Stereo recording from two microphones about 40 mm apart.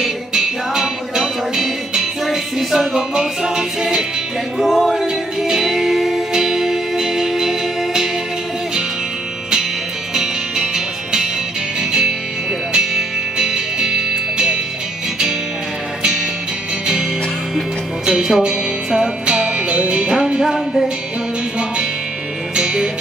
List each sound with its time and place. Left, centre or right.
0.0 s music: centre
4.6 s a sound: centre
5.4 s music: centre
10.1 s music: centre
12.7 s music: centre
18.0 s music: centre
20.5 s music: centre
22.6 s music: centre